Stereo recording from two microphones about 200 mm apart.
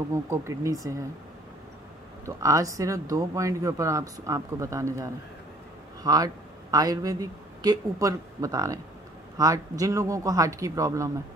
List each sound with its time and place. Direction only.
0.1 s speech: 15° right (ahead or behind)
2.2 s speech: 15° right (ahead or behind)